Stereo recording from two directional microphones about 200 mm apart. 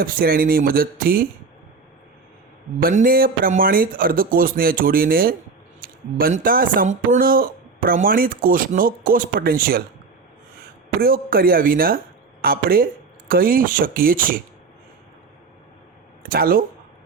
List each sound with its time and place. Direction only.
0.0 s speech: 45° right (ahead or behind)
2.8 s speech: 45° right (ahead or behind)
11.0 s speech: 45° right (ahead or behind)
16.2 s speech: 45° right (ahead or behind)